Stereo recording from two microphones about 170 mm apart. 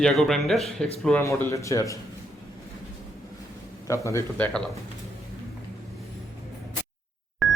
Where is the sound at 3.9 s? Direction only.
15° left (ahead or behind).